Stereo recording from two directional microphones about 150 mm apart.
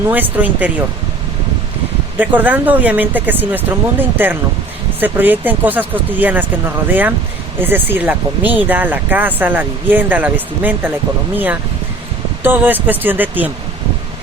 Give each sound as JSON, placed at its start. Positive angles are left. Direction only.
{"t": 0.1, "sound": "speech", "side_deg": -10}
{"t": 2.1, "sound": "speech", "side_deg": -10}
{"t": 12.4, "sound": "speech", "side_deg": -15}